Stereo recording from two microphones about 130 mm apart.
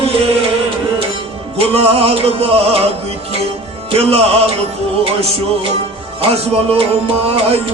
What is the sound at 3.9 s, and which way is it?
Music, 50° right (ahead or behind).